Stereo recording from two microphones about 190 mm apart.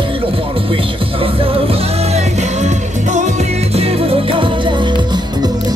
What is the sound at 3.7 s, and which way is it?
Music, 30° right (ahead or behind).